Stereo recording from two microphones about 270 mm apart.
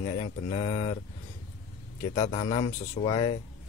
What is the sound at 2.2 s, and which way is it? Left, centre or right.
Speech, left.